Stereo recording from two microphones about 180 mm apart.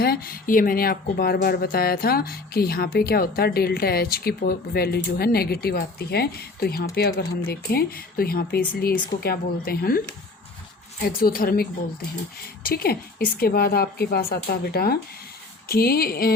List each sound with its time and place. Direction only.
0.0 s speech: 55° left (ahead or behind)
11.0 s speech: 55° left (ahead or behind)